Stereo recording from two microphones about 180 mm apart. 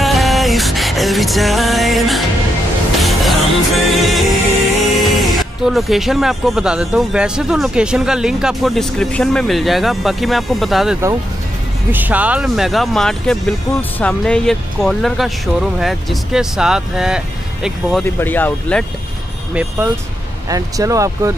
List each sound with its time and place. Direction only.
0.0 s music: centre (ahead or behind)
4.9 s speech: centre (ahead or behind)
18.0 s speech: 10° left (ahead or behind)
20.4 s speech: 20° right (ahead or behind)